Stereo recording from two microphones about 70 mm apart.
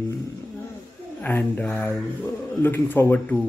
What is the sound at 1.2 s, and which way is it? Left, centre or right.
Speech, left.